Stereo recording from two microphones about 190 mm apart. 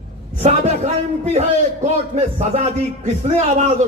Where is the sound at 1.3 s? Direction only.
35° right (ahead or behind).